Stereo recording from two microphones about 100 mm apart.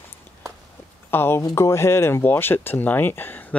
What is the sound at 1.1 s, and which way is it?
Speech, 25° left (ahead or behind).